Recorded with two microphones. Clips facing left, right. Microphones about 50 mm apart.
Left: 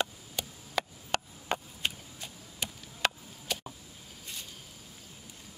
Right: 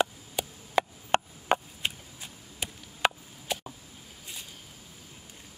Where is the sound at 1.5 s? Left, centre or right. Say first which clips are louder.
Right 7 dB; right.